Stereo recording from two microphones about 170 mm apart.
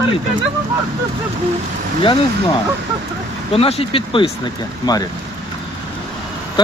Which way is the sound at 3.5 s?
35° left (ahead or behind).